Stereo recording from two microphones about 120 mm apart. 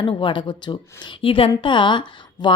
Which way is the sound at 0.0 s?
45° left (ahead or behind).